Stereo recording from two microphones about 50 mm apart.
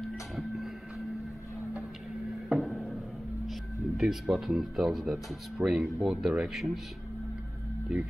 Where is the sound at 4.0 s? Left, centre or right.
Centre.